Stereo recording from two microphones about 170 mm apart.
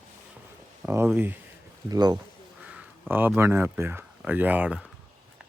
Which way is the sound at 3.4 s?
15° right (ahead or behind).